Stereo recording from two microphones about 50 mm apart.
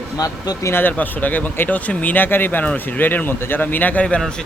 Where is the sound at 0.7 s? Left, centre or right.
Left.